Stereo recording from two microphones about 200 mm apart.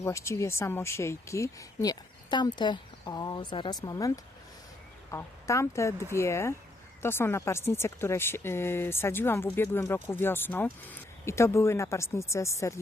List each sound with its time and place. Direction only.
0.0 s speech: 15° left (ahead or behind)